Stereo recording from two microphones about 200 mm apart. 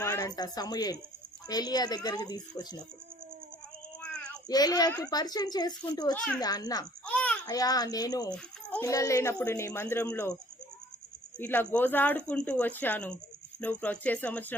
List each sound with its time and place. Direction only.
0.0 s a child's voice: 15° left (ahead or behind)
4.0 s child singing: 5° left (ahead or behind)
4.4 s a child's voice: 20° left (ahead or behind)
6.1 s a woman's voice: 5° left (ahead or behind)
6.4 s a child's voice: 20° left (ahead or behind)
7.0 s babbling: 5° left (ahead or behind)
7.4 s a child's voice: 20° left (ahead or behind)
11.3 s speech: 10° left (ahead or behind)